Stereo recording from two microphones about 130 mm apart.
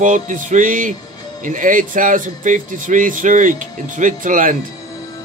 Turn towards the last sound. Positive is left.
turn(degrees=-90)